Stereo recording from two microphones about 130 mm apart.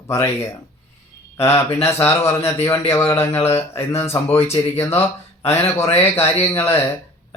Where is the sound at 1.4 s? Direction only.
20° left (ahead or behind).